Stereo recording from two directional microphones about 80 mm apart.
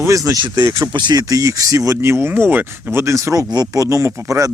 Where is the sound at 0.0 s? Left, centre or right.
Right.